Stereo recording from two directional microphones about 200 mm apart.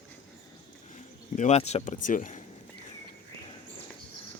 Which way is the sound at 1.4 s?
35° left (ahead or behind).